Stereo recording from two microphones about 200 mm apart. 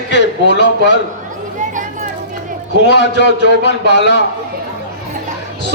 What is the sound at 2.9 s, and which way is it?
A man's voice, 60° left (ahead or behind).